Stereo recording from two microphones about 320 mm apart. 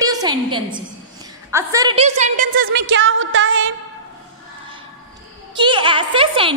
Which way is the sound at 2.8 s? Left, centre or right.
Right.